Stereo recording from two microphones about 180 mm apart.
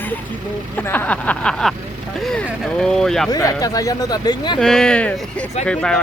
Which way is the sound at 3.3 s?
20° left (ahead or behind).